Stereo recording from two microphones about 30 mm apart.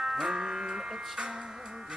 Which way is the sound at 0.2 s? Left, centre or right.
Centre.